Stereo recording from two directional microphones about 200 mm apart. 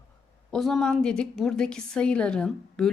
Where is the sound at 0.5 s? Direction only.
Centre (ahead or behind).